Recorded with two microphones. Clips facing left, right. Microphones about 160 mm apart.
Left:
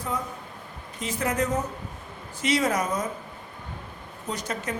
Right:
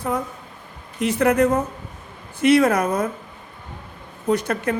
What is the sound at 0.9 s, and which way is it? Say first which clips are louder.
A woman's voice: right 9 dB; 70° right (ahead or behind).